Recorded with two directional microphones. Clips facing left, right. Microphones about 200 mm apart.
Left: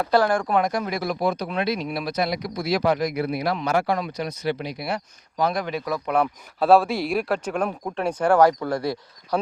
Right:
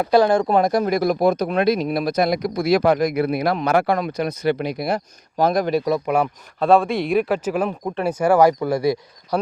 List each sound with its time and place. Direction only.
0.0 s speech: 15° right (ahead or behind); by 5.8 s 40° right (ahead or behind)
6.1 s speech: 10° right (ahead or behind)
6.6 s speech: centre (ahead or behind)